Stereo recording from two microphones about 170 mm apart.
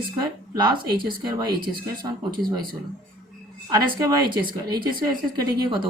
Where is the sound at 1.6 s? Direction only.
60° right (ahead or behind).